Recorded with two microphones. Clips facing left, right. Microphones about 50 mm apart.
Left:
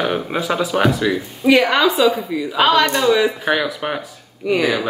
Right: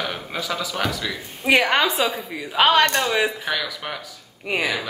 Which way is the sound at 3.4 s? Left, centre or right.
Left.